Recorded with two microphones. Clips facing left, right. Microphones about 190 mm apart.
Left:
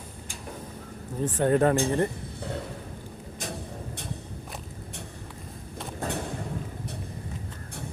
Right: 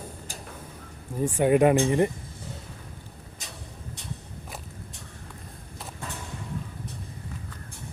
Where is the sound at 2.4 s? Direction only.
65° left (ahead or behind).